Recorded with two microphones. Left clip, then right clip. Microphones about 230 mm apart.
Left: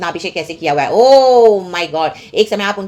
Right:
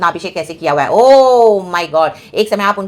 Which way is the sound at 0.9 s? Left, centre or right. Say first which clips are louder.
Right 1 dB; right.